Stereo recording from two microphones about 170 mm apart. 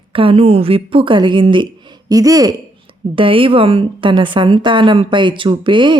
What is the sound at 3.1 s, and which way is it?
Speech, 30° right (ahead or behind).